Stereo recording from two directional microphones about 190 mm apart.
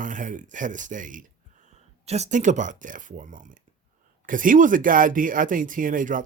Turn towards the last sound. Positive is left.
turn(degrees=-45)  # may be behind; listen again after turning